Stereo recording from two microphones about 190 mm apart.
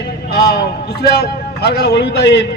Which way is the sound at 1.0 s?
60° left (ahead or behind).